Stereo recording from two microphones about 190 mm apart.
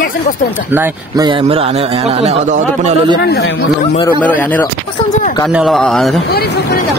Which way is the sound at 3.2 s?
60° left (ahead or behind).